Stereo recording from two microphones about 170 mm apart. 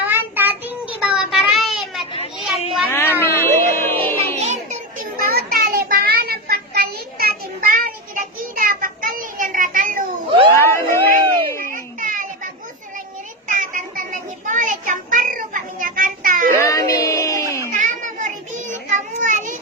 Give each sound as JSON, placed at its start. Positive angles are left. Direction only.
{"t": 0.0, "sound": "child singing", "side_deg": -10}
{"t": 2.4, "sound": "children playing", "side_deg": 0}
{"t": 3.2, "sound": "music", "side_deg": 15}
{"t": 4.2, "sound": "music", "side_deg": -40}
{"t": 5.2, "sound": "child singing", "side_deg": -60}
{"t": 10.2, "sound": "cat", "side_deg": -35}
{"t": 10.6, "sound": "a sound", "side_deg": 15}
{"t": 11.7, "sound": "child singing", "side_deg": -50}
{"t": 13.5, "sound": "child singing", "side_deg": -50}
{"t": 16.6, "sound": "a sound", "side_deg": 20}
{"t": 17.7, "sound": "children playing", "side_deg": -45}